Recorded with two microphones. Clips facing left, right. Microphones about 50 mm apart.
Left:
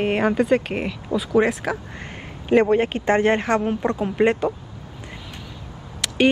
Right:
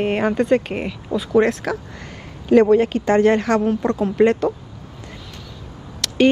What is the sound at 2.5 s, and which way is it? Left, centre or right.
Speech, left.